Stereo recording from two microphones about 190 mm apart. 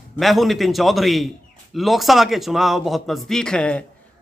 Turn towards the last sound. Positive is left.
turn(degrees=5)  # may be behind; listen again after turning